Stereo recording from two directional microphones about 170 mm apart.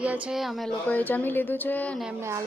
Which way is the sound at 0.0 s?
5° right (ahead or behind).